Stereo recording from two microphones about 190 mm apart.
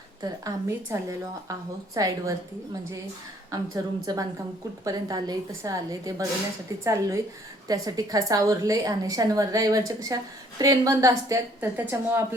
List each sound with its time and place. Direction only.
0.2 s a woman's voice: 15° right (ahead or behind)
3.5 s a woman's voice: 20° right (ahead or behind)